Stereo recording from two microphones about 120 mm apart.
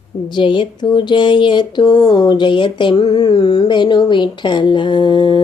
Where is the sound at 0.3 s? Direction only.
45° left (ahead or behind).